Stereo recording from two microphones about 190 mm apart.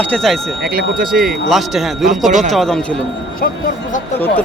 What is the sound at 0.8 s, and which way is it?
Speech, 50° right (ahead or behind).